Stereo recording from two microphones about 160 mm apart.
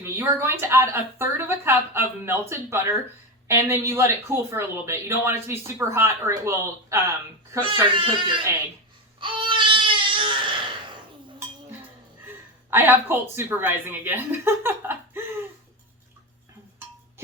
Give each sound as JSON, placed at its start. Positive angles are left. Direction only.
{"t": 0.0, "sound": "speech", "side_deg": -15}
{"t": 7.6, "sound": "speech", "side_deg": -30}
{"t": 9.2, "sound": "baby cry", "side_deg": -30}
{"t": 12.7, "sound": "speech", "side_deg": -15}